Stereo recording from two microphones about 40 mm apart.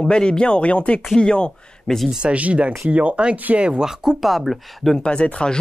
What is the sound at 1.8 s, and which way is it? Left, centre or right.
Speech, centre.